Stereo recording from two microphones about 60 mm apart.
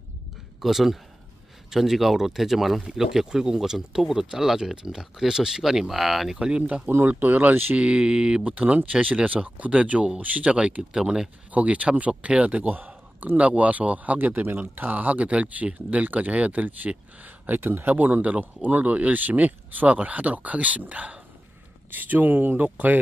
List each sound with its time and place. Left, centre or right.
0.6 s speech: centre
6.3 s speech: centre
7.1 s speech: right
7.7 s a man's voice: centre
11.5 s a man's voice: right
17.6 s a man's voice: right